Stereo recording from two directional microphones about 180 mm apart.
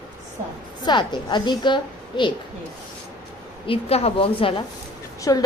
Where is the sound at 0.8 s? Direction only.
25° left (ahead or behind).